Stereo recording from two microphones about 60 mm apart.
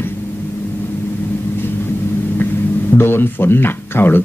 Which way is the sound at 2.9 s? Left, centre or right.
Left.